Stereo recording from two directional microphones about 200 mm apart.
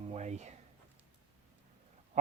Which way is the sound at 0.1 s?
35° right (ahead or behind).